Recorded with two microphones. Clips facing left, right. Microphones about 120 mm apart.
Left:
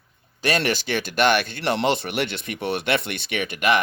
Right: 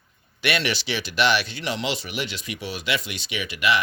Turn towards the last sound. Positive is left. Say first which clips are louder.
# left 3 dB
turn(degrees=50)  # may be behind; listen again after turning